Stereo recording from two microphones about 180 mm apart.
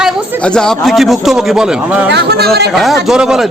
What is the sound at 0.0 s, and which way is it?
Speech, 5° left (ahead or behind).